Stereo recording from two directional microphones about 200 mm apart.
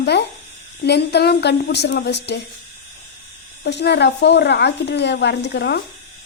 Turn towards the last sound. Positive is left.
turn(degrees=60)  # may be behind; listen again after turning